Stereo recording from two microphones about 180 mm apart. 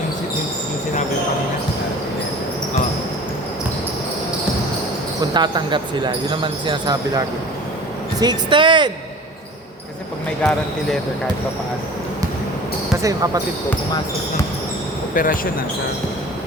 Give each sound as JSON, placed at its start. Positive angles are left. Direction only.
{"t": 5.3, "sound": "speech", "side_deg": -25}
{"t": 13.0, "sound": "speech", "side_deg": -20}
{"t": 15.1, "sound": "speech", "side_deg": 50}